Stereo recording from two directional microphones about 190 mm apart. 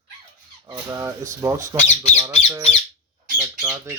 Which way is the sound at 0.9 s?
15° right (ahead or behind).